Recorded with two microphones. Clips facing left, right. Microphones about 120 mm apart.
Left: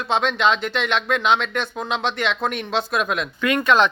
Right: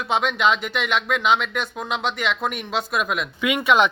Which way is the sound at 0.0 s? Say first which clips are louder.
Left 1 dB; 5° right (ahead or behind).